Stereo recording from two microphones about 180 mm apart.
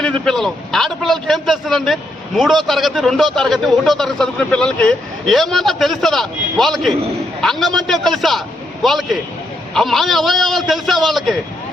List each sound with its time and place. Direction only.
0.0 s a man's voice: 5° left (ahead or behind)